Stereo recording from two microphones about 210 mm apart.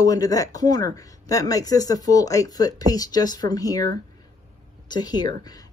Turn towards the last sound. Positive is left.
turn(degrees=20)  # may be behind; listen again after turning